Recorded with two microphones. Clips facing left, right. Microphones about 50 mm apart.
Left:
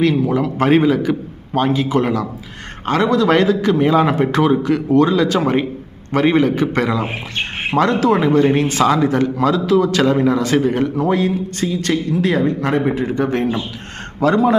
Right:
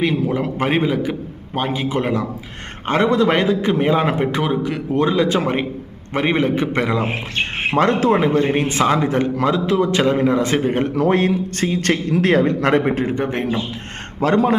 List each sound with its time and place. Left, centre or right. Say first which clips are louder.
0.6 s a man's voice: left 6 dB; centre
4.2 s a man's voice: left 4 dB; centre
4.9 s a man's voice: left 1 dB; right
10.8 s a man's voice: even; right
13.1 s a man's voice: left 3 dB; right
14.2 s speech: left 2 dB; right